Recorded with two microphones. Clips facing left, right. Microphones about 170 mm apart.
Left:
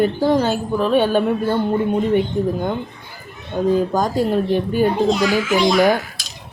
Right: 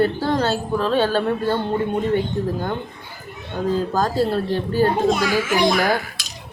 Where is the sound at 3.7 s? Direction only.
15° left (ahead or behind).